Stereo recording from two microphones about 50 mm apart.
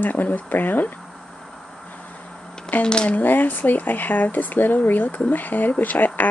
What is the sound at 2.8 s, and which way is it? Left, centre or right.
Speech, centre.